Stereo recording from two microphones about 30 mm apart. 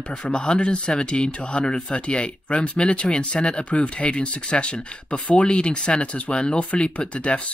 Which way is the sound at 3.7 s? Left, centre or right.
Left.